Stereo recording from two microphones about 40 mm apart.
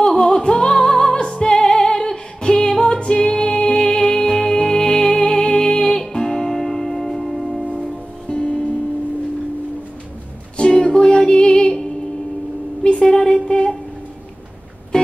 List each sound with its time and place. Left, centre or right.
0.0 s music: centre
8.3 s music: left
10.6 s music: centre
12.8 s a sound: centre